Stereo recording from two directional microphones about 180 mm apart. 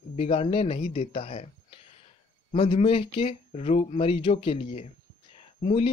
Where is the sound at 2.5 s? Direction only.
30° left (ahead or behind).